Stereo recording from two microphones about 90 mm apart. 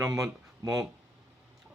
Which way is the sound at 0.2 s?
40° right (ahead or behind).